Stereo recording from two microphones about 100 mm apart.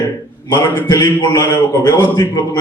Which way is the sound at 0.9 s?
35° left (ahead or behind).